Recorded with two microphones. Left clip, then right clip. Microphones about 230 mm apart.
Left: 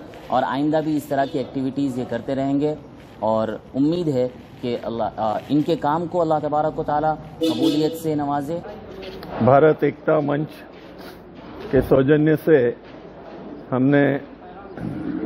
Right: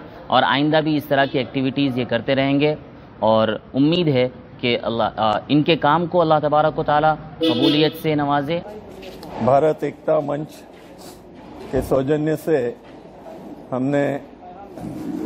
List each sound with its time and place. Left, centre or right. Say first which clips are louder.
0.3 s a man's voice: right 4 dB; right
9.2 s a man's voice: left 2 dB; left
11.7 s a man's voice: left 3 dB; left